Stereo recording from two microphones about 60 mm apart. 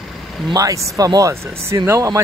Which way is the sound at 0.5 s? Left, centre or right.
Right.